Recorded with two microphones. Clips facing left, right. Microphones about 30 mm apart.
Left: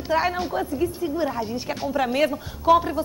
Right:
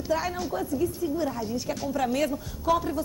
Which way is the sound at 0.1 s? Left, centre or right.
Left.